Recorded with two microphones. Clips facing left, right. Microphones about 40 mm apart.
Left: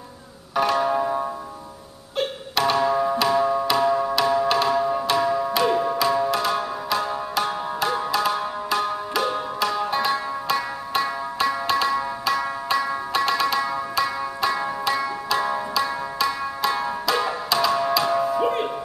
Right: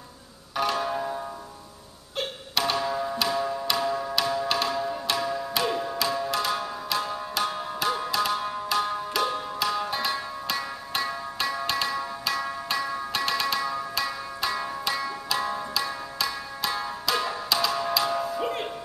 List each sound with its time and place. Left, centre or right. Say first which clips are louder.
0.6 s zither: left 6 dB; centre
2.1 s music: left 5 dB; centre
4.1 s music: left 6 dB; centre
4.7 s music: left 7 dB; centre
15.7 s music: left 6 dB; centre
16.3 s music: left 7 dB; centre